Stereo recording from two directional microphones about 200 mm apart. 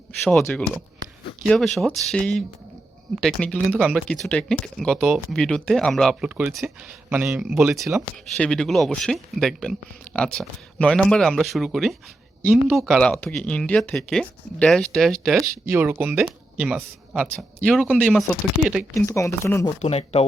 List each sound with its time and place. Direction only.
0.3 s speech: 5° left (ahead or behind)
15.6 s speech: 10° right (ahead or behind); by 19.7 s 15° left (ahead or behind)
19.8 s speech: 30° left (ahead or behind)